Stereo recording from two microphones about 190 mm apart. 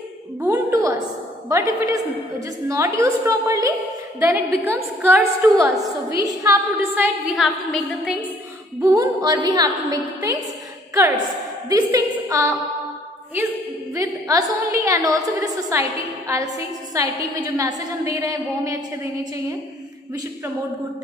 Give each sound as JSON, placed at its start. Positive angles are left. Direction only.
{"t": 0.4, "sound": "a woman's voice", "side_deg": -15}
{"t": 8.8, "sound": "a woman's voice", "side_deg": -20}
{"t": 11.7, "sound": "a woman's voice", "side_deg": -20}
{"t": 13.9, "sound": "a woman's voice", "side_deg": -20}